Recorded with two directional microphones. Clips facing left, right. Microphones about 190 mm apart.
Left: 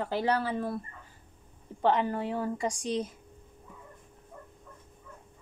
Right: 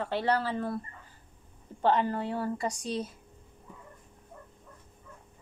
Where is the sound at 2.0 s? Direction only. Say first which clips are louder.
Even; 15° left (ahead or behind).